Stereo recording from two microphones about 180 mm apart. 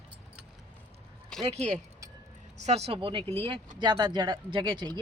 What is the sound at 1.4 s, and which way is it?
Speech, 40° right (ahead or behind).